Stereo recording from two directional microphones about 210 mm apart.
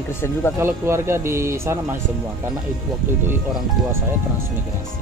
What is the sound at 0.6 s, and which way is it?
Speech, 10° right (ahead or behind).